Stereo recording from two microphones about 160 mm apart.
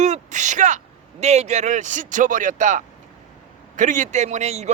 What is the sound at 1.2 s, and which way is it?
A man's voice, 45° right (ahead or behind).